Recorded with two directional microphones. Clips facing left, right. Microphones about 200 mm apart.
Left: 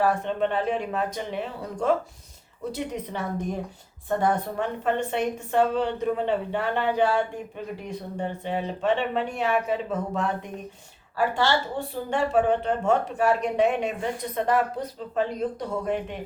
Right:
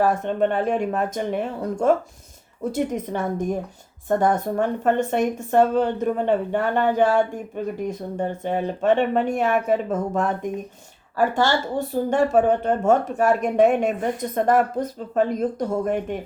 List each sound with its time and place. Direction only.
0.0 s speech: 45° right (ahead or behind)